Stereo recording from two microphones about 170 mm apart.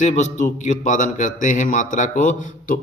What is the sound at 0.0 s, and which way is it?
A man's voice, 45° left (ahead or behind).